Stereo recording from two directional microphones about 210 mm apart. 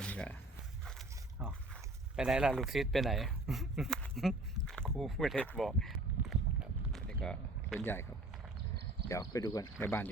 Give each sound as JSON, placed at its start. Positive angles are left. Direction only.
{"t": 0.0, "sound": "walk", "side_deg": 5}
{"t": 0.9, "sound": "a sound", "side_deg": 0}
{"t": 9.0, "sound": "speech", "side_deg": 15}